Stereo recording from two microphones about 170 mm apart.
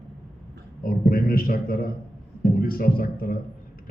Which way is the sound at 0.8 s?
55° left (ahead or behind).